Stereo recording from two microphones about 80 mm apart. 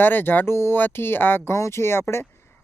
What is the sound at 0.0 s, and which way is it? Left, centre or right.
Speech, left.